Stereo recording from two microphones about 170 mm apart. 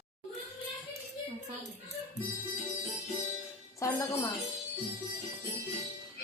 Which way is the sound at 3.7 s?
20° left (ahead or behind).